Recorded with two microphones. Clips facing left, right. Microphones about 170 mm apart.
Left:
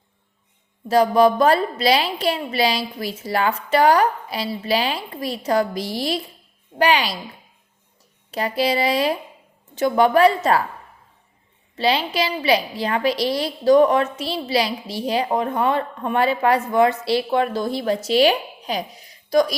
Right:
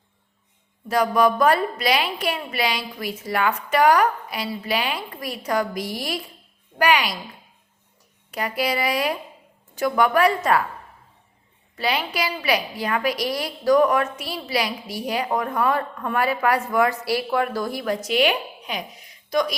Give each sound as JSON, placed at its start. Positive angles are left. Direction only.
{"t": 0.9, "sound": "a woman's voice", "side_deg": 30}
{"t": 8.3, "sound": "a woman's voice", "side_deg": 30}
{"t": 11.8, "sound": "a woman's voice", "side_deg": 30}